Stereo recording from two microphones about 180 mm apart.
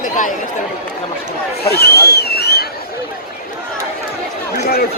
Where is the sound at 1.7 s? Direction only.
60° left (ahead or behind).